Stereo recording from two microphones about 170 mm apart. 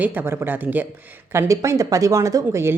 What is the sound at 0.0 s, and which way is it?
A woman's voice, 10° right (ahead or behind).